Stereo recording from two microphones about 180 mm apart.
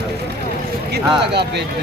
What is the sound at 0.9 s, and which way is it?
Speech, 70° right (ahead or behind).